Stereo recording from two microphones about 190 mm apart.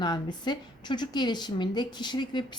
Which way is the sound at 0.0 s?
20° left (ahead or behind).